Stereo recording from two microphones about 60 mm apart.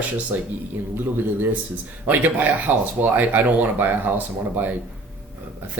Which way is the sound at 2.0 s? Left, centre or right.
Right.